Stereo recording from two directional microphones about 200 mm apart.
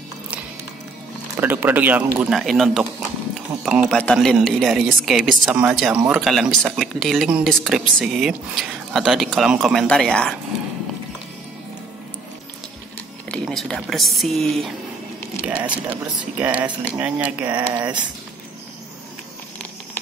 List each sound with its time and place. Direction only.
1.4 s speech: 10° right (ahead or behind)
13.3 s speech: 5° left (ahead or behind)